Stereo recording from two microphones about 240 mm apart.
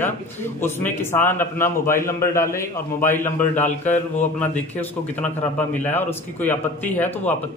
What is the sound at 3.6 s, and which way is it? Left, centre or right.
Speech, left.